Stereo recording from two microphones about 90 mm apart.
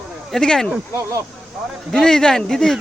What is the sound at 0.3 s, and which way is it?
Speech, 5° left (ahead or behind).